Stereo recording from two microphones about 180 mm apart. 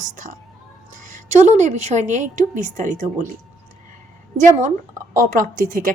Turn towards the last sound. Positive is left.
turn(degrees=-45)  # may be behind; listen again after turning